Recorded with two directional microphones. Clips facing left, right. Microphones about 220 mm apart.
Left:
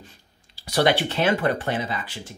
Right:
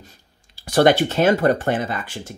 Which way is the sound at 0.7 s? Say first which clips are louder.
Right 6 dB; 50° right (ahead or behind).